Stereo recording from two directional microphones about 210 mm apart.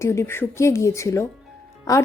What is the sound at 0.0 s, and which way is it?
Speech, 15° left (ahead or behind).